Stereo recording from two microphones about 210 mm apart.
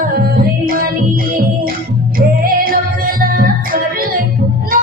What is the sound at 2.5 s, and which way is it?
Music, 45° right (ahead or behind).